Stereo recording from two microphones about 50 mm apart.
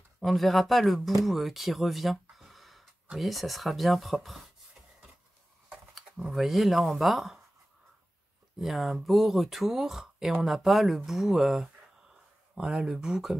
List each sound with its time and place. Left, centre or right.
0.2 s speech: centre
6.3 s speech: centre
8.5 s speech: centre